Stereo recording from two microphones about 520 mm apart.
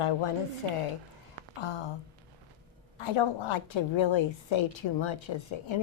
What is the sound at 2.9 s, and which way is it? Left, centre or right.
A woman's voice, left.